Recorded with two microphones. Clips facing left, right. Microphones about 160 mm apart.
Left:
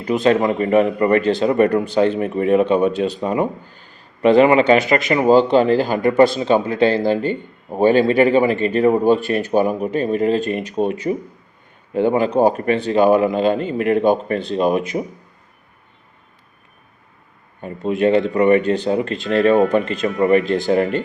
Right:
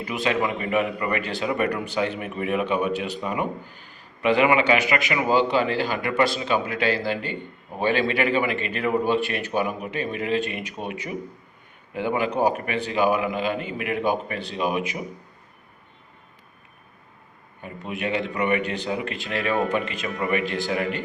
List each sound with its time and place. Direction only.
0.0 s a man's voice: 40° left (ahead or behind)
7.0 s a man's voice: 45° left (ahead or behind)
11.9 s a man's voice: 35° left (ahead or behind)
17.6 s a man's voice: 35° left (ahead or behind)